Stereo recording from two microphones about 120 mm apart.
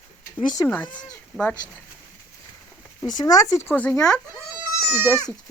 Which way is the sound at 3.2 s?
30° left (ahead or behind).